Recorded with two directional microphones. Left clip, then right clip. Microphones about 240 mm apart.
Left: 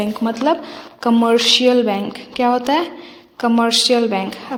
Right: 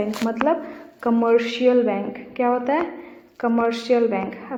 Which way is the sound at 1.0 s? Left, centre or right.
Left.